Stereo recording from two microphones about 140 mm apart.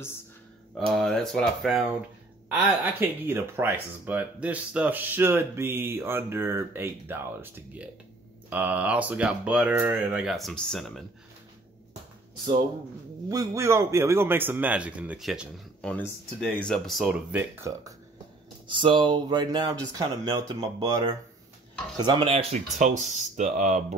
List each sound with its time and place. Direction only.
0.7 s speech: 5° left (ahead or behind)
2.5 s speech: 10° right (ahead or behind)
10.2 s speech: centre (ahead or behind)
13.3 s speech: 20° right (ahead or behind); by 15.9 s centre (ahead or behind)
15.9 s speech: 10° left (ahead or behind); by 17.9 s 20° right (ahead or behind)
18.7 s speech: 35° right (ahead or behind)
21.9 s speech: 30° right (ahead or behind)
22.3 s speech: 50° right (ahead or behind)
23.1 s speech: 60° right (ahead or behind)